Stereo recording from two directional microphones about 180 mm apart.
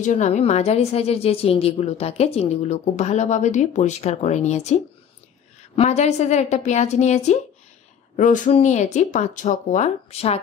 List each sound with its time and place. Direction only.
0.0 s a woman's voice: 40° left (ahead or behind)
5.8 s a woman's voice: 40° left (ahead or behind)